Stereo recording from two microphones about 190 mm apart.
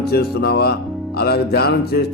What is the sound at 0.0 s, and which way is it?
Speech, 55° left (ahead or behind).